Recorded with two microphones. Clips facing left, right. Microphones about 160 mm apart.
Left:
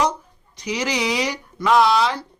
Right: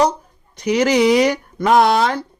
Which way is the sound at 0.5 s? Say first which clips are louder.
Right 9 dB; 55° right (ahead or behind).